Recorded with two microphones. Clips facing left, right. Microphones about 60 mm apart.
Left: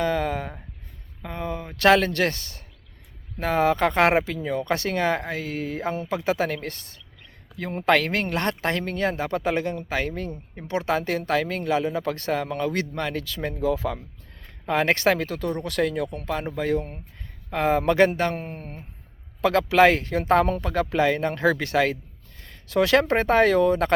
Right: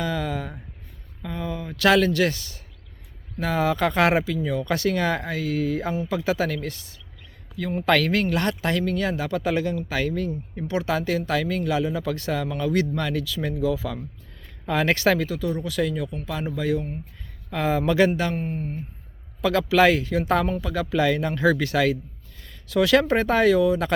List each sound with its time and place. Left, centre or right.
0.0 s a sound: left
3.4 s speech: left
7.9 s speech: left
15.3 s speech: left
16.5 s speech: left
18.3 s speech: left
19.4 s speech: left
21.0 s speech: left